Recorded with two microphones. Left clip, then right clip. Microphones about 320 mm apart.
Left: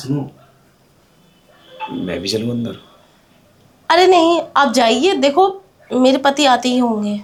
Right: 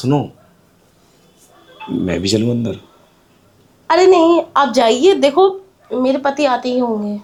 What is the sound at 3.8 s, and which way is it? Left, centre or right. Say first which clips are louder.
A woman's voice: right 1 dB; centre.